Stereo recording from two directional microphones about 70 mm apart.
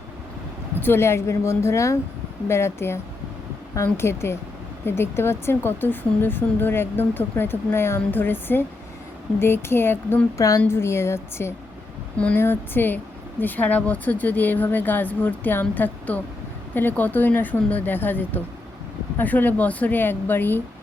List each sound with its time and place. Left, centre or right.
0.8 s speech: left
10.3 s a woman's voice: left
10.7 s speech: left
12.1 s speech: centre
12.4 s a woman's voice: left